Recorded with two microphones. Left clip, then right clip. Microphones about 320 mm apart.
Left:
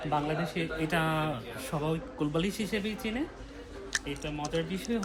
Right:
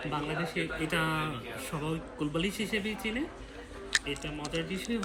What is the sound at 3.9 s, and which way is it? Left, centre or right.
Speech, centre.